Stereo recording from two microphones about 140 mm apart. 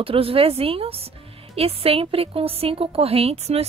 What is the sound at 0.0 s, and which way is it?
A woman's voice, 40° right (ahead or behind).